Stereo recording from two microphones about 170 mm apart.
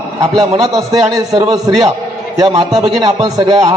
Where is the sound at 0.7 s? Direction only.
20° right (ahead or behind).